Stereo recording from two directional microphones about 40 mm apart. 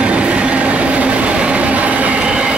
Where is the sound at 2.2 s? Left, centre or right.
Right.